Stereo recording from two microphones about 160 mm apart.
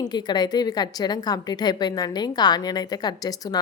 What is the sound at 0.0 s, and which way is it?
A woman's voice, 25° left (ahead or behind).